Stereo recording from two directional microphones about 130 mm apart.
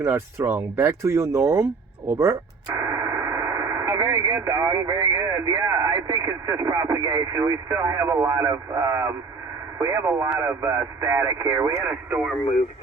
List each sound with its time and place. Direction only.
0.0 s speech: 20° right (ahead or behind)